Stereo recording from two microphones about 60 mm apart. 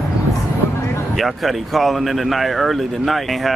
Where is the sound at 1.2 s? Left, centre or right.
Centre.